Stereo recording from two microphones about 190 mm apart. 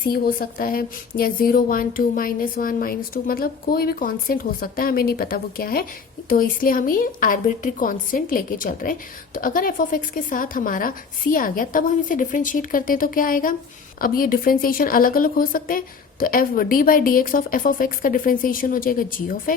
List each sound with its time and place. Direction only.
0.0 s speech: 50° left (ahead or behind)